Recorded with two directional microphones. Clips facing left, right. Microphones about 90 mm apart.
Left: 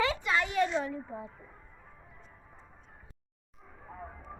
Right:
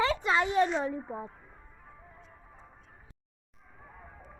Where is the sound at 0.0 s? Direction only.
35° right (ahead or behind).